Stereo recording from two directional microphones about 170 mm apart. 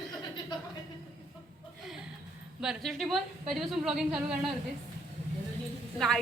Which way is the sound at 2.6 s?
Centre (ahead or behind).